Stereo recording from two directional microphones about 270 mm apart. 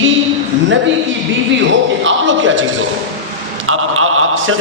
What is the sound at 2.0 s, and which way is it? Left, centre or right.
Speech, right.